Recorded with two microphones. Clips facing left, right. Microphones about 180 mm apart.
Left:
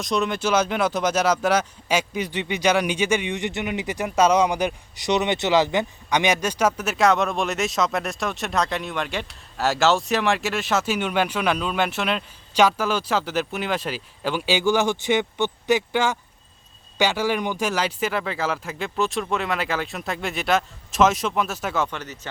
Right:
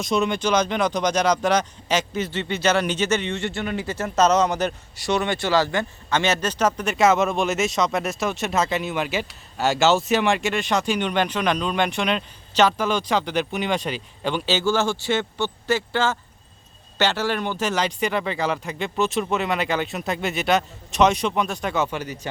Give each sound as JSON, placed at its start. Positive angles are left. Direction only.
{"t": 0.0, "sound": "speech", "side_deg": 0}
{"t": 21.8, "sound": "speech", "side_deg": -10}